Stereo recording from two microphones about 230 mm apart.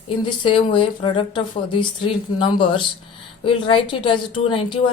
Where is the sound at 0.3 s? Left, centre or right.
Left.